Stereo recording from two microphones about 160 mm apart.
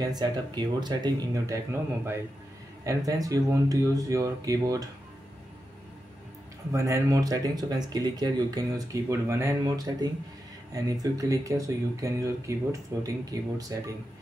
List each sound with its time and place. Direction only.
0.0 s speech: 25° right (ahead or behind)
6.7 s speech: 20° right (ahead or behind)